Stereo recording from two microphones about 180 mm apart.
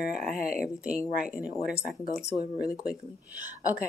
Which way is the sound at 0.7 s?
5° right (ahead or behind).